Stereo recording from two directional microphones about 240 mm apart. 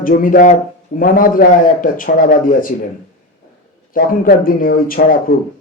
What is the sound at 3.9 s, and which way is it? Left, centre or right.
A man's voice, left.